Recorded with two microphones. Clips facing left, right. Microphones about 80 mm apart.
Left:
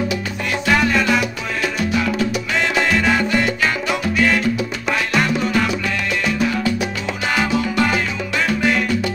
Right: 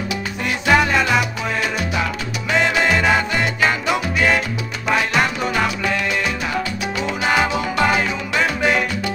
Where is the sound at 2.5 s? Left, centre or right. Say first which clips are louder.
Right 4 dB; centre.